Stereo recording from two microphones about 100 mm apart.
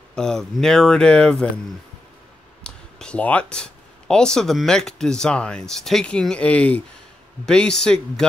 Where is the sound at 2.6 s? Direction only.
10° left (ahead or behind).